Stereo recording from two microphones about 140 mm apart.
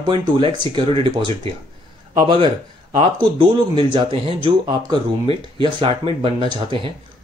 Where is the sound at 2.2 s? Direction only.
35° right (ahead or behind).